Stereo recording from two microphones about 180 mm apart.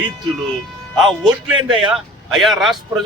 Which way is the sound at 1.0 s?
Centre (ahead or behind).